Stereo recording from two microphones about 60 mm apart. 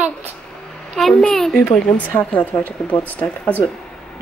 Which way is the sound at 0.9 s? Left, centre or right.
Centre.